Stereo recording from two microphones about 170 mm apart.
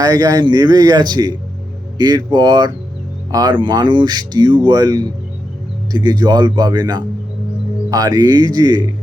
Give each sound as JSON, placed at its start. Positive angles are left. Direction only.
{"t": 0.0, "sound": "speech", "side_deg": -20}